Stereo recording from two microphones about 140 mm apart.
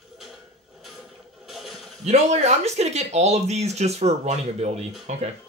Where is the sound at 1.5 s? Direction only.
Centre (ahead or behind).